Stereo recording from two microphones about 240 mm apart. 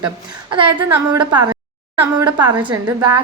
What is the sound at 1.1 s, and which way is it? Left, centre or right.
Speech, centre.